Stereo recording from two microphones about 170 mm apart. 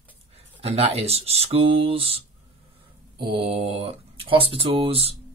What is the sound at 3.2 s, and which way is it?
Speech, 30° right (ahead or behind).